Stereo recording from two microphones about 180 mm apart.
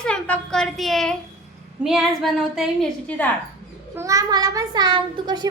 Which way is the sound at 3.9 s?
20° right (ahead or behind).